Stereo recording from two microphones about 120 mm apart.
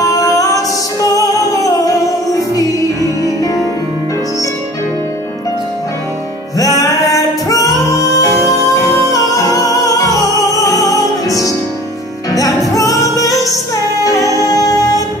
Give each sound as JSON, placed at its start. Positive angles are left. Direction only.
{"t": 0.2, "sound": "music", "side_deg": 30}
{"t": 6.6, "sound": "music", "side_deg": 25}